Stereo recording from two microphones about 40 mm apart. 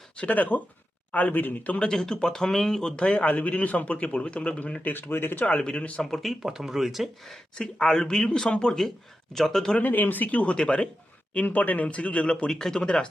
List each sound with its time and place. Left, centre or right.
0.2 s a man's voice: left
1.8 s speech: centre
2.9 s speech: left
3.2 s a man's voice: left
4.8 s speech: left
5.5 s speech: left
6.5 s speech: centre
7.5 s speech: centre
9.3 s speech: centre
9.8 s speech: left
10.4 s speech: left
11.3 s a man's voice: left
12.5 s speech: centre